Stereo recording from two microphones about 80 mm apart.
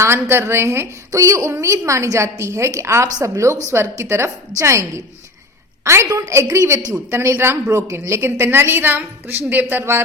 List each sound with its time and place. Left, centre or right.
0.0 s a woman's voice: right